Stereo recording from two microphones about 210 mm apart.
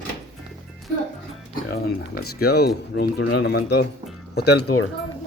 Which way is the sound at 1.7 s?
50° left (ahead or behind).